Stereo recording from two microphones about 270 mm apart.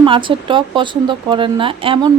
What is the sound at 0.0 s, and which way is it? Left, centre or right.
Speech, centre.